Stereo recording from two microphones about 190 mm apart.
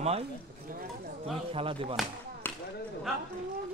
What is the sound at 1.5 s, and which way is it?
Speech, 30° right (ahead or behind).